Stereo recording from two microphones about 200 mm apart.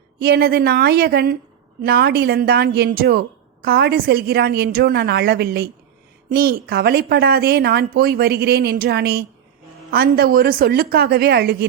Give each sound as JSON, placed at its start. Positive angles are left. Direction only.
{"t": 0.2, "sound": "speech", "side_deg": -50}